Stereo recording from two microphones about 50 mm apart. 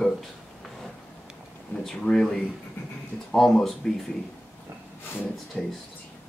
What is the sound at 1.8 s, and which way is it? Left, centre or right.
Speech, centre.